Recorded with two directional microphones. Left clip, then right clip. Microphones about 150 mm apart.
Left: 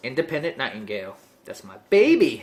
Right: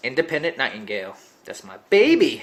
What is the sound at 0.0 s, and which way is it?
Speech, 20° right (ahead or behind).